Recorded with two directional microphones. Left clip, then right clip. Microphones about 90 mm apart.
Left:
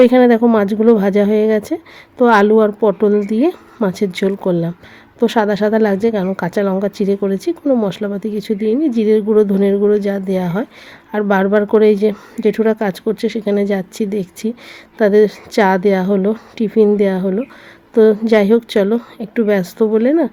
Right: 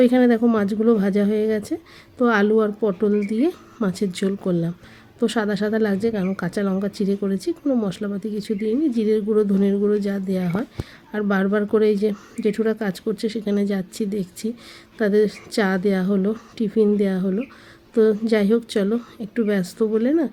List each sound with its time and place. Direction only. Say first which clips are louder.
0.0 s a woman's voice: left 7 dB; 35° left (ahead or behind)
7.6 s a woman's voice: left 8 dB; 25° left (ahead or behind)
7.9 s a woman's voice: left 7 dB; 35° left (ahead or behind)